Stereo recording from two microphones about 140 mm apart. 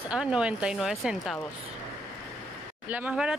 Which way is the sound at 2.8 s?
10° right (ahead or behind).